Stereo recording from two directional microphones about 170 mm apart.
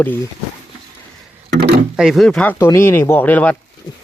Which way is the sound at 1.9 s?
Centre (ahead or behind).